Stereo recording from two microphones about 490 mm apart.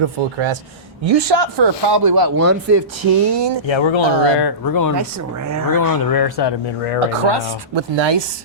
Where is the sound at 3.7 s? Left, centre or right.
Left.